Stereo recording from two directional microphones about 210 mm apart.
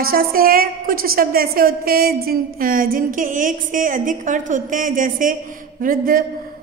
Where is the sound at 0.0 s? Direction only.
45° right (ahead or behind).